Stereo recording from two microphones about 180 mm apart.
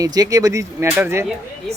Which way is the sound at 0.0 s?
20° right (ahead or behind).